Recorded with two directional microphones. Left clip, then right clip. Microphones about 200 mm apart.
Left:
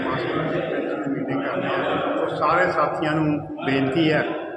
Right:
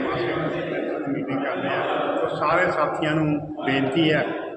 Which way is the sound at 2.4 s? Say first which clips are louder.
Left 2 dB; centre (ahead or behind).